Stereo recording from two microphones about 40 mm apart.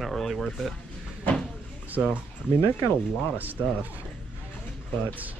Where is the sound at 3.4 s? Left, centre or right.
Right.